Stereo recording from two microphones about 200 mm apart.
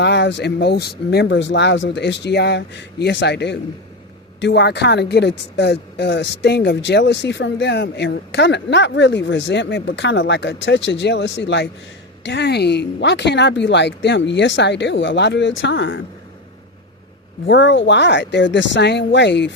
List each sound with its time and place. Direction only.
0.0 s speech: 60° left (ahead or behind)
17.5 s speech: 65° left (ahead or behind)